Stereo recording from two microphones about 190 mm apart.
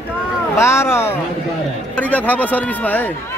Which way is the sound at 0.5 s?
15° left (ahead or behind).